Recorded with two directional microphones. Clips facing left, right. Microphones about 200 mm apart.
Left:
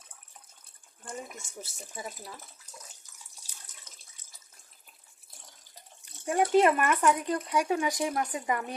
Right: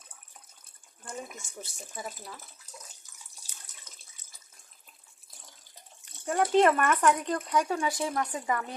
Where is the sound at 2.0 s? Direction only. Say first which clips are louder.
Right 1 dB; 5° left (ahead or behind).